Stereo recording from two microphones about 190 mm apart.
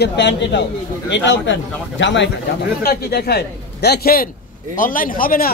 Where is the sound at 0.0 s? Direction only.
65° left (ahead or behind).